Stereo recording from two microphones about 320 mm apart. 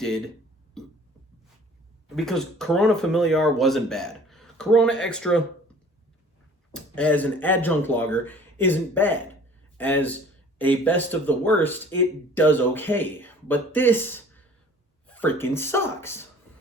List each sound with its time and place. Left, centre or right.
0.8 s speech: centre
2.0 s speech: centre
6.7 s speech: centre